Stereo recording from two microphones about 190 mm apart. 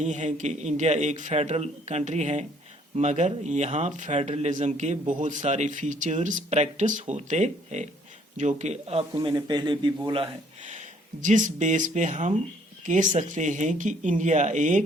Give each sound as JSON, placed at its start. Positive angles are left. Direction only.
{"t": 0.0, "sound": "speech", "side_deg": -40}
{"t": 9.1, "sound": "a man's voice", "side_deg": -20}
{"t": 10.6, "sound": "speech", "side_deg": -40}